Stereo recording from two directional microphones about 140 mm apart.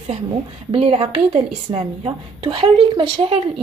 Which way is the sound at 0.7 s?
45° right (ahead or behind).